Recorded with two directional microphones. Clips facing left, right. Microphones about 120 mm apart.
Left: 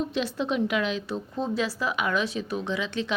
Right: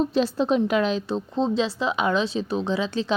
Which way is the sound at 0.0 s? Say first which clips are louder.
Right 6 dB; 35° right (ahead or behind).